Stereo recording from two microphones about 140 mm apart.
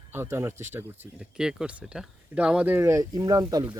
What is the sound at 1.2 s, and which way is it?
Speech, 5° right (ahead or behind).